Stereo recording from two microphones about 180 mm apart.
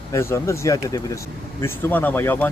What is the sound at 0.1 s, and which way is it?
Speech, 15° left (ahead or behind).